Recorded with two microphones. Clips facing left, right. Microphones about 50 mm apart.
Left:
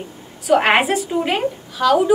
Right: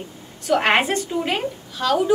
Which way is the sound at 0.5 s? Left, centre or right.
Centre.